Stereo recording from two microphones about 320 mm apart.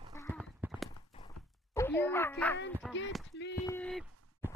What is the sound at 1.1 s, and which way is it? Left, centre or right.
Walk, centre.